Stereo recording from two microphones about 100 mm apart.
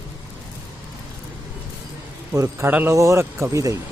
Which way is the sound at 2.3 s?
30° right (ahead or behind).